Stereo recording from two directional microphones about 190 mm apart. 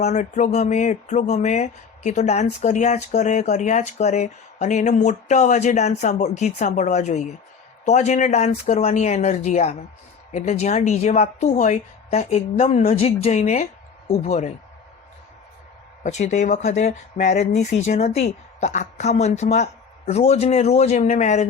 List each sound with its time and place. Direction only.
0.0 s speech: 40° left (ahead or behind)
16.0 s speech: 40° left (ahead or behind)